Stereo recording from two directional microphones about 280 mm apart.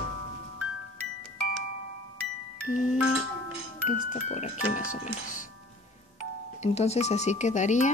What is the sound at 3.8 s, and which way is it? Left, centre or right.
Speech, left.